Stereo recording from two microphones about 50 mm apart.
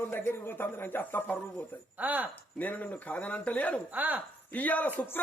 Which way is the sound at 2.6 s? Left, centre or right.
Left.